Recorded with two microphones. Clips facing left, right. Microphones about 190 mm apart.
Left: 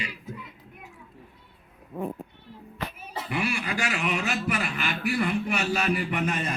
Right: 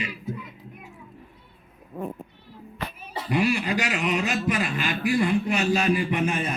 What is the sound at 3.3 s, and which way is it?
Speech, 35° right (ahead or behind).